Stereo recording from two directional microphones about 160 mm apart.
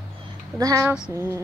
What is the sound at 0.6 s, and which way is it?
Speech, 20° right (ahead or behind).